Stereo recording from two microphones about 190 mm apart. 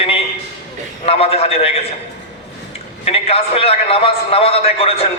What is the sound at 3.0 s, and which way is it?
A man's voice, 30° left (ahead or behind).